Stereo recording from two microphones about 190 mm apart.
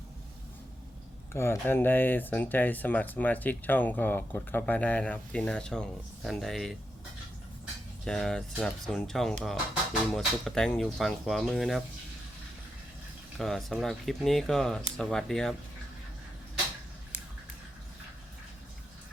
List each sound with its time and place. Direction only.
1.3 s speech: 15° left (ahead or behind)
13.4 s speech: centre (ahead or behind)